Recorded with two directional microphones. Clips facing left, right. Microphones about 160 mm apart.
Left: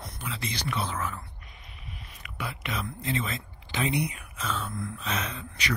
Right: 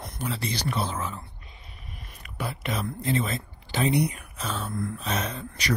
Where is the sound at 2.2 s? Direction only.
40° right (ahead or behind).